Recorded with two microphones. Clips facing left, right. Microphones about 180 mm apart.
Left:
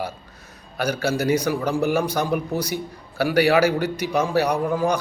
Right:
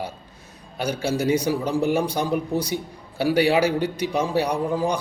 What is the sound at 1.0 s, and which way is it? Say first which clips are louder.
A man's voice: even; 30° right (ahead or behind).